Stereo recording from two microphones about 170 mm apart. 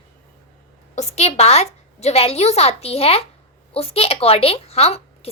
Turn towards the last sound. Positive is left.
turn(degrees=35)  # may be behind; listen again after turning